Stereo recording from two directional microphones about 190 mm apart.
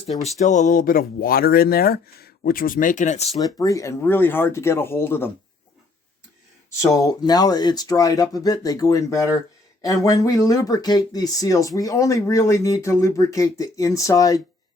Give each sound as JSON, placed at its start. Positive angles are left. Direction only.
{"t": 0.3, "sound": "speech", "side_deg": 40}
{"t": 3.4, "sound": "speech", "side_deg": 20}
{"t": 6.9, "sound": "speech", "side_deg": 20}